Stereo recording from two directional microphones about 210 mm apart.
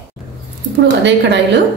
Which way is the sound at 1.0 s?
55° right (ahead or behind).